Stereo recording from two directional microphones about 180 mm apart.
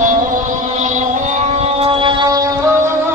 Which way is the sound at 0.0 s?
45° right (ahead or behind).